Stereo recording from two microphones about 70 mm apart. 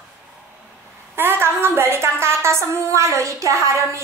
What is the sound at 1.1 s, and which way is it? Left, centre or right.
A woman's voice, right.